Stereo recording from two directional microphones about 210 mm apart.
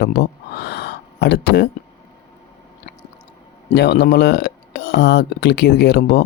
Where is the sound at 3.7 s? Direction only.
50° left (ahead or behind).